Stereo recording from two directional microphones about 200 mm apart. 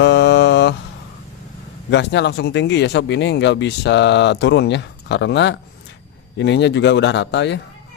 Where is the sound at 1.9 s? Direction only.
60° left (ahead or behind).